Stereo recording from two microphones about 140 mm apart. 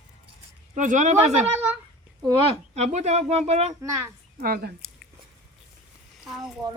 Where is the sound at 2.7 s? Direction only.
55° right (ahead or behind).